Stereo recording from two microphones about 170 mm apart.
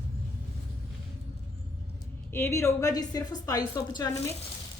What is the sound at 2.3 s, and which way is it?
A woman's voice, 15° left (ahead or behind).